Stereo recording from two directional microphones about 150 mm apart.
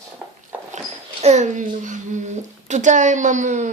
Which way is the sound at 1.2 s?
50° right (ahead or behind).